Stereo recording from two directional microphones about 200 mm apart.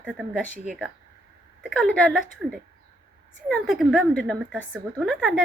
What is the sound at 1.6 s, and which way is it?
Speech, centre (ahead or behind).